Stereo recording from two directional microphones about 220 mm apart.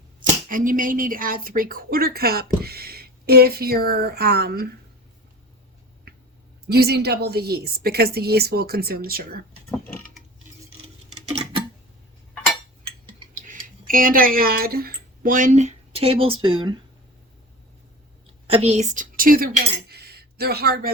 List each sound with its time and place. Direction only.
0.4 s speech: 40° right (ahead or behind)
6.7 s speech: 45° right (ahead or behind)
9.6 s mechanisms: 10° left (ahead or behind)
11.1 s clock: 30° right (ahead or behind)
13.3 s speech: 40° right (ahead or behind); by 16.8 s 20° right (ahead or behind)
18.4 s a woman's voice: 25° right (ahead or behind)
19.9 s a sound: 45° right (ahead or behind)